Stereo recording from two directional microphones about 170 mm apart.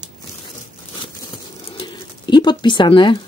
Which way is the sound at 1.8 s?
30° left (ahead or behind).